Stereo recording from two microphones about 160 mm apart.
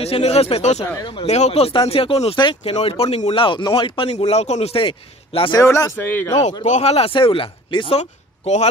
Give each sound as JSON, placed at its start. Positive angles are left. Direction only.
{"t": 0.0, "sound": "speech", "side_deg": 40}
{"t": 0.8, "sound": "speech", "side_deg": 25}
{"t": 1.2, "sound": "speech", "side_deg": 45}
{"t": 5.6, "sound": "a man's voice", "side_deg": 20}
{"t": 6.6, "sound": "speech", "side_deg": 45}
{"t": 8.0, "sound": "speech", "side_deg": 45}